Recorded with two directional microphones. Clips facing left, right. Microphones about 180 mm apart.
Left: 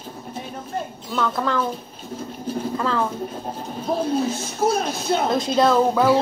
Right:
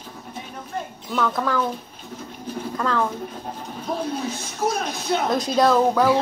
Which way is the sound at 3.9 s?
30° left (ahead or behind).